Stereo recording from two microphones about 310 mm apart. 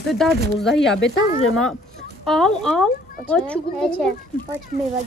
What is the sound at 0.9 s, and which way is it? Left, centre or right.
Speech, left.